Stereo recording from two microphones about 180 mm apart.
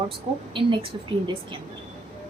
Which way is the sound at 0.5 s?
30° right (ahead or behind).